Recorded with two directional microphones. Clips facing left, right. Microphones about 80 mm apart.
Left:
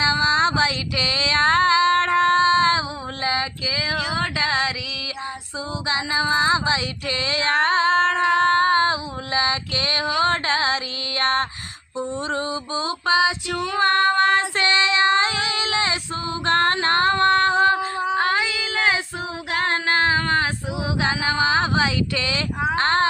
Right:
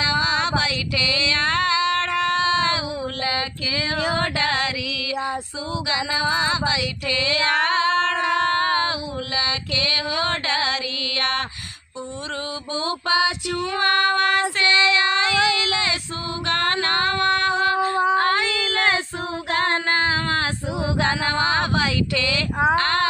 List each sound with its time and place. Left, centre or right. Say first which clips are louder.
0.0 s female singing: left 3 dB; left
3.2 s female singing: left 1 dB; left
4.1 s music: even; centre
5.9 s female singing: left 2 dB; left
11.2 s a sound: left 4 dB; left
12.3 s music: left 3 dB; left
14.6 s child singing: even; left
16.5 s female singing: left 3 dB; left
17.9 s a sound: right 4 dB; right
18.2 s child singing: right 1 dB; centre
19.5 s female singing: even; centre
20.8 s speech: right 1 dB; centre
22.8 s music: left 2 dB; left